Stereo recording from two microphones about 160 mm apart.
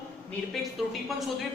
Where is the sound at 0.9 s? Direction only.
Centre (ahead or behind).